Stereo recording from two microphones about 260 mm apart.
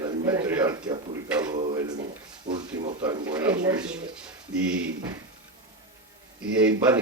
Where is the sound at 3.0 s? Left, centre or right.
Centre.